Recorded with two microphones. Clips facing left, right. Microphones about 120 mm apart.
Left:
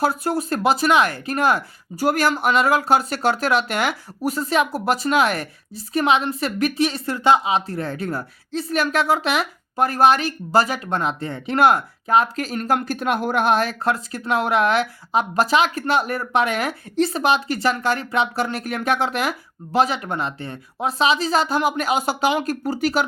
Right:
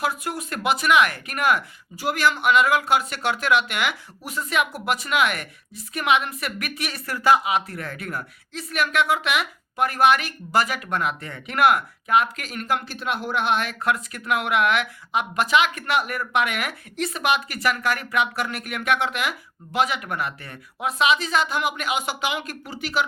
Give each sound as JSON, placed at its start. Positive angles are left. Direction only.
{"t": 0.0, "sound": "speech", "side_deg": 35}